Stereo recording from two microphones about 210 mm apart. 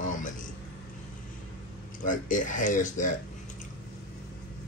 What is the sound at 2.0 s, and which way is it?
Speech, 40° left (ahead or behind).